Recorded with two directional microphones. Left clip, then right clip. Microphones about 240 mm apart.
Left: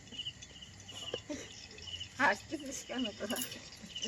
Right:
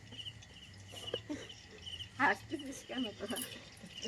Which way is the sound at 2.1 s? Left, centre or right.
Left.